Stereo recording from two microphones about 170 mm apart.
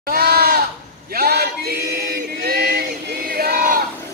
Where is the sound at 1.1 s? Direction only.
65° right (ahead or behind).